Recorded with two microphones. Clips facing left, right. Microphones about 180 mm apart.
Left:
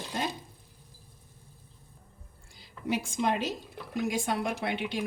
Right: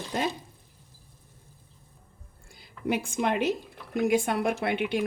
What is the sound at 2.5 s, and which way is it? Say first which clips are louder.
A woman's voice: right 3 dB; 60° right (ahead or behind).